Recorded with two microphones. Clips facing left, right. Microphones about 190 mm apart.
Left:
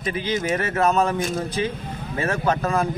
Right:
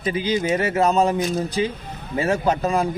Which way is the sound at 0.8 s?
30° right (ahead or behind).